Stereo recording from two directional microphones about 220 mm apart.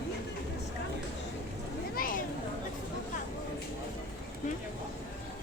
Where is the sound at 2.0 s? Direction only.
40° left (ahead or behind).